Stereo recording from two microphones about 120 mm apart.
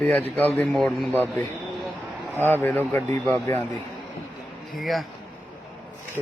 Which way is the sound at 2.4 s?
15° left (ahead or behind).